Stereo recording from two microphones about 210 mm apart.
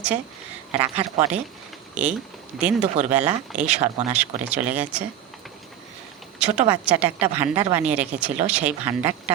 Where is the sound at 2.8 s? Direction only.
35° right (ahead or behind).